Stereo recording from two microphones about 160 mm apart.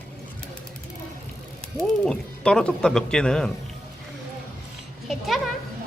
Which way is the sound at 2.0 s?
5° left (ahead or behind).